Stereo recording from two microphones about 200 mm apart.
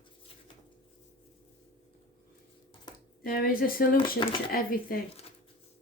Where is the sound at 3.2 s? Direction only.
45° left (ahead or behind).